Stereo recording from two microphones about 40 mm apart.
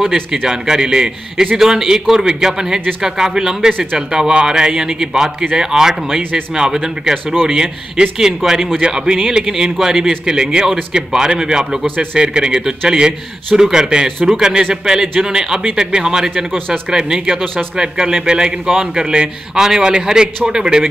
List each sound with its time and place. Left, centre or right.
0.0 s a man's voice: centre
8.7 s a man's voice: right